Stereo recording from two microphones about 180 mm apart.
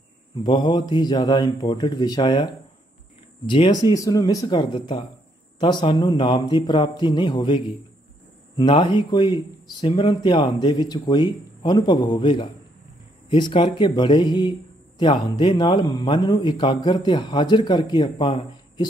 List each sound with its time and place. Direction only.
0.4 s speech: 25° left (ahead or behind)